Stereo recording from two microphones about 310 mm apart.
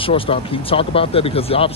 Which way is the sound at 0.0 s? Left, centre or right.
Centre.